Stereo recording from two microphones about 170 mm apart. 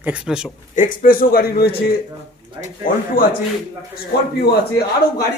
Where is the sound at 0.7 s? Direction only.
50° left (ahead or behind).